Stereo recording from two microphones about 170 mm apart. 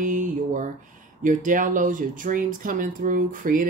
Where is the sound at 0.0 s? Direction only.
50° right (ahead or behind).